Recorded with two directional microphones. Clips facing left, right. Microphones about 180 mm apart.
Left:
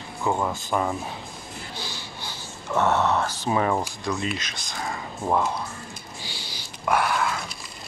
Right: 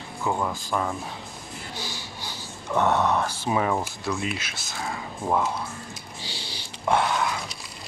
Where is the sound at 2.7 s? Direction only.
15° right (ahead or behind); by 5.5 s 5° left (ahead or behind).